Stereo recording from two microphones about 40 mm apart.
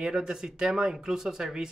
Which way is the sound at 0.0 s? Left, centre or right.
Centre.